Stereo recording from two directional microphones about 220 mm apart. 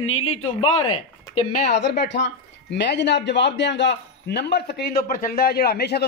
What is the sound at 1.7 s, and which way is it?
A man's voice, 50° left (ahead or behind).